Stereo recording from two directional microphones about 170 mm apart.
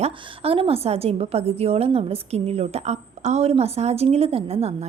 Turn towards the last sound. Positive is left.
turn(degrees=-35)  # may be behind; listen again after turning